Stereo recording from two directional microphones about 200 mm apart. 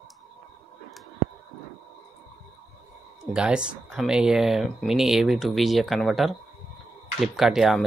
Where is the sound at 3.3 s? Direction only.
5° right (ahead or behind).